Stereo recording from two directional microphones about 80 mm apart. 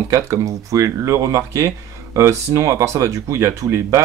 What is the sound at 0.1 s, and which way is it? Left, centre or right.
Speech, right.